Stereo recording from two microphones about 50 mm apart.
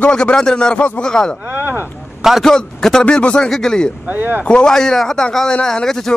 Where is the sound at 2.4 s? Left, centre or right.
Centre.